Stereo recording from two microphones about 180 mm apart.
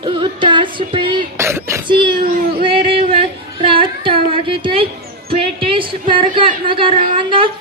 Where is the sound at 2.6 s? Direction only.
30° right (ahead or behind).